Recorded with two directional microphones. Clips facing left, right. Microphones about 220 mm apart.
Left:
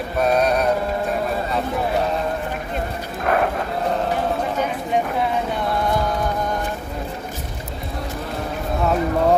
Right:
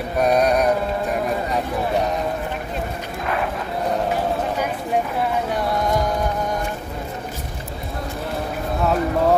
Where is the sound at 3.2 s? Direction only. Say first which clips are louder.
Left 5 dB; 50° left (ahead or behind).